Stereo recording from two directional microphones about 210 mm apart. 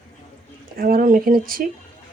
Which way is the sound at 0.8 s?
45° right (ahead or behind).